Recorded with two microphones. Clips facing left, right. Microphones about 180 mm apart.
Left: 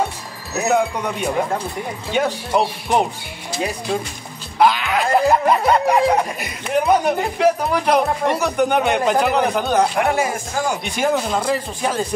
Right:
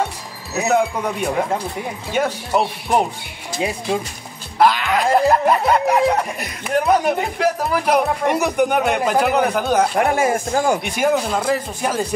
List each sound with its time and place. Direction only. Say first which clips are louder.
0.7 s snicker: even; centre (ahead or behind)
4.6 s snicker: even; centre (ahead or behind)
9.9 s speech: right 2 dB; 50° right (ahead or behind)
11.0 s speech: right 1 dB; 5° right (ahead or behind)